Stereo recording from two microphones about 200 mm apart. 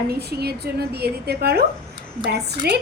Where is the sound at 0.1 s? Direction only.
55° right (ahead or behind).